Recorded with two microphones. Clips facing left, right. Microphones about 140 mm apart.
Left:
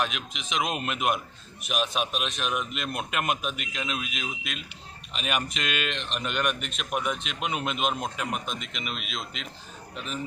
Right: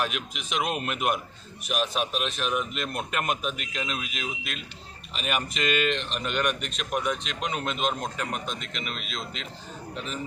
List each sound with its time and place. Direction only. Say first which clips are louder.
0.0 s speech: even; 5° right (ahead or behind)